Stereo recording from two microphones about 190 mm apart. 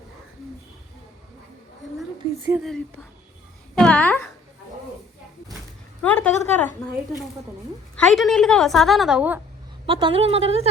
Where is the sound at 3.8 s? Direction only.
5° left (ahead or behind).